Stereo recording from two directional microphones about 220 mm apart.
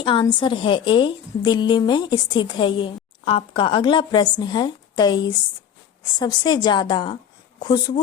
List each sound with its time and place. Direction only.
0.0 s a woman's voice: 20° left (ahead or behind)